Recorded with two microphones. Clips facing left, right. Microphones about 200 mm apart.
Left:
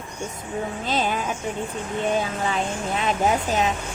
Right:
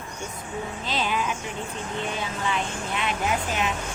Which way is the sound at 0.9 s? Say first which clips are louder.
Left 3 dB; 45° left (ahead or behind).